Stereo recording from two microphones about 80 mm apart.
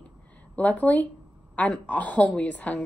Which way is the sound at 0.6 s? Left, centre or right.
Centre.